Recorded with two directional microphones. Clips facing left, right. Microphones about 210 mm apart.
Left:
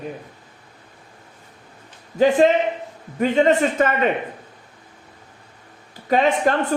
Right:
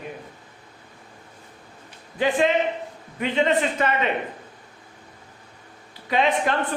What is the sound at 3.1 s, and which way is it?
Speech, 45° left (ahead or behind).